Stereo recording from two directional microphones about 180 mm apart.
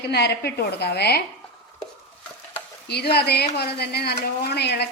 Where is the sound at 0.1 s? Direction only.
65° left (ahead or behind).